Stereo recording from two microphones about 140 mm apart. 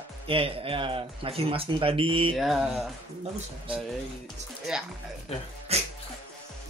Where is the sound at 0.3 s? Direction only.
40° right (ahead or behind).